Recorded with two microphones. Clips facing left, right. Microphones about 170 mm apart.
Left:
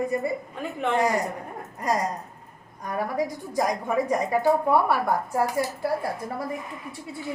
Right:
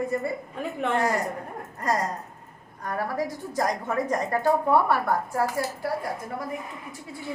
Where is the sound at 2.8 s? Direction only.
15° left (ahead or behind).